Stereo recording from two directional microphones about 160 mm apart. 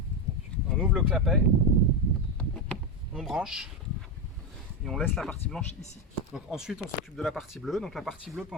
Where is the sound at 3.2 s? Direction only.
Centre (ahead or behind).